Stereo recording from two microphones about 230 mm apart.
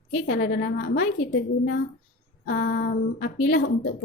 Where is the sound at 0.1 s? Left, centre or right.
Left.